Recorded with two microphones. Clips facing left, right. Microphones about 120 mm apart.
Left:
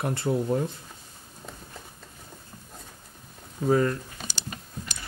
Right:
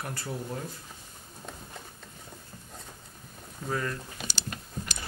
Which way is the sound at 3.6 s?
35° left (ahead or behind).